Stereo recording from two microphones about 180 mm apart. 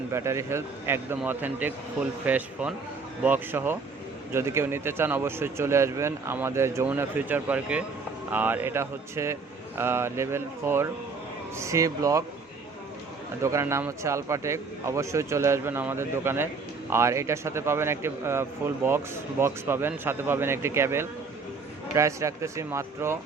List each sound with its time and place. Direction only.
0.1 s a man's voice: 15° right (ahead or behind)
13.4 s a man's voice: 15° right (ahead or behind)